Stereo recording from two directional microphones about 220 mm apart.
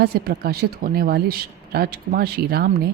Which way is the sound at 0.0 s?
45° right (ahead or behind).